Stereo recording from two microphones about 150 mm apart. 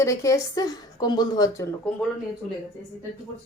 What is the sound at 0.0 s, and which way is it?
A woman's voice, 20° left (ahead or behind).